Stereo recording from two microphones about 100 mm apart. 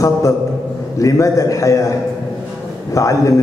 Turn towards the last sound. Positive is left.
turn(degrees=35)  # may be behind; listen again after turning